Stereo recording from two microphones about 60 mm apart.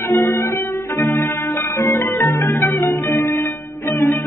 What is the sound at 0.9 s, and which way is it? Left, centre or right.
Music, left.